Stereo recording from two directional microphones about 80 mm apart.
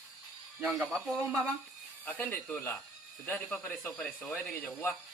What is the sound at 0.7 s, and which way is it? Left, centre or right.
Speech, centre.